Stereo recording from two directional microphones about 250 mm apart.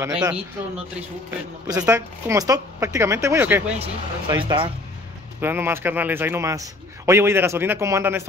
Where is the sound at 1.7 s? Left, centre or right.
Centre.